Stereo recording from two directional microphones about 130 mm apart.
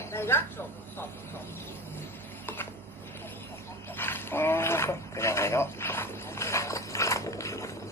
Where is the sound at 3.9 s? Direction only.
15° left (ahead or behind).